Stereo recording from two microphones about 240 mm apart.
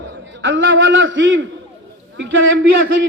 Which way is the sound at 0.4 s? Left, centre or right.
Right.